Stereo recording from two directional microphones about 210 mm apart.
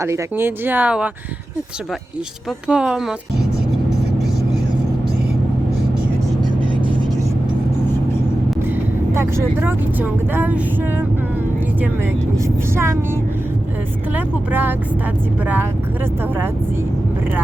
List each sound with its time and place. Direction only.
0.0 s speech: 15° right (ahead or behind)
2.6 s speech: 5° right (ahead or behind)
6.6 s vehicle: 25° right (ahead or behind)
8.6 s speech: 10° right (ahead or behind)